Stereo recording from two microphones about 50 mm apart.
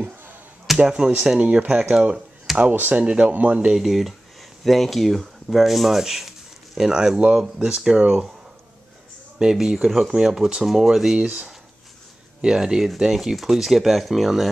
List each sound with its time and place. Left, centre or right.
0.7 s speech: centre
1.4 s a man's voice: right
3.0 s a man's voice: right
3.3 s a man's voice: right
3.7 s speech: centre
9.4 s speech: centre